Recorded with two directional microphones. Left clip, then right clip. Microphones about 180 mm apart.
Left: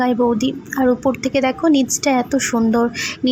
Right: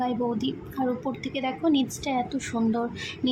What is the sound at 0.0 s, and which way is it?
A woman's voice, 30° left (ahead or behind).